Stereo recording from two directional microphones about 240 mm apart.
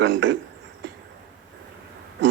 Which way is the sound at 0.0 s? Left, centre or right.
Right.